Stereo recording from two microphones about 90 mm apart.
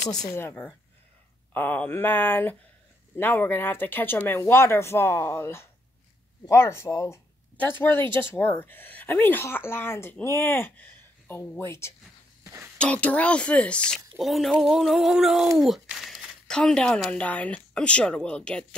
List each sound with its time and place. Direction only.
0.1 s a woman's voice: 45° left (ahead or behind)
0.4 s a woman's voice: 25° left (ahead or behind)
7.5 s a woman's voice: 25° left (ahead or behind)
12.7 s a woman's voice: 15° left (ahead or behind)
14.1 s speech: centre (ahead or behind)
16.4 s a woman's voice: 10° left (ahead or behind)